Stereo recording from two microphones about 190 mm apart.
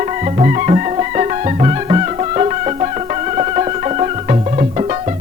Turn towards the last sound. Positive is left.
turn(degrees=-35)  # may be behind; listen again after turning